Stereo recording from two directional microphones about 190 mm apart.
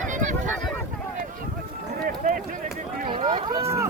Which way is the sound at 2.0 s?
50° right (ahead or behind).